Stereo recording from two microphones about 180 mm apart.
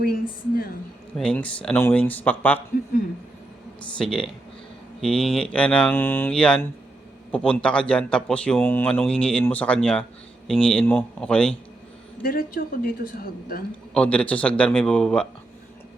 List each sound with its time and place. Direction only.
0.0 s a woman's voice: 55° left (ahead or behind)
1.1 s speech: 5° left (ahead or behind)
3.9 s speech: 5° left (ahead or behind)
12.2 s a woman's voice: 55° left (ahead or behind)
13.9 s speech: 5° left (ahead or behind)